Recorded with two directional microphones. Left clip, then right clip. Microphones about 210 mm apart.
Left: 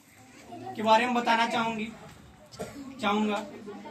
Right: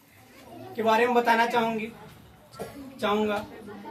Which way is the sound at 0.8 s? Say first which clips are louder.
Right 2 dB; 20° right (ahead or behind).